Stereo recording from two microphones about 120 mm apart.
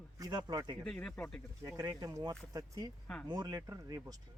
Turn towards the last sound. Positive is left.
turn(degrees=-30)  # may be behind; listen again after turning